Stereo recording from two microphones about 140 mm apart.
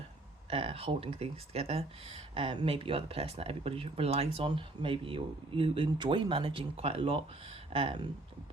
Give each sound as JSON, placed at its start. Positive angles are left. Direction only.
{"t": 0.5, "sound": "speech", "side_deg": -45}